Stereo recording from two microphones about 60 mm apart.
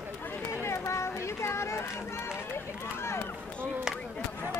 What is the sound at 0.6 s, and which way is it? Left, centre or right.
Run, left.